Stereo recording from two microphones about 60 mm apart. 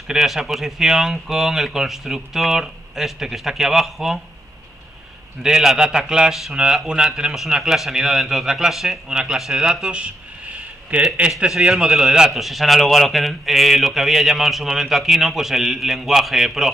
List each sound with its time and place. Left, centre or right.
0.1 s a man's voice: centre
5.4 s a man's voice: centre